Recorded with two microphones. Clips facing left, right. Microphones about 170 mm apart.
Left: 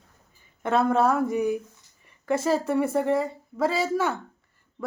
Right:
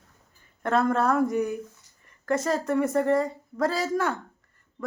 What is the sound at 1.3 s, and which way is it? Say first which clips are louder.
Speech: left 2 dB; 25° left (ahead or behind).